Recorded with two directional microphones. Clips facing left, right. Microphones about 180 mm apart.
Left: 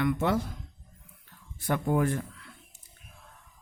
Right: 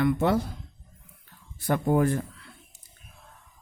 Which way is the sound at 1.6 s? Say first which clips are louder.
Right 3 dB; 35° right (ahead or behind).